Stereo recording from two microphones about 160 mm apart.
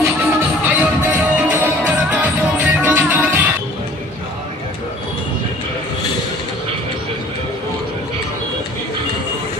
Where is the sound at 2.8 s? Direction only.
15° right (ahead or behind).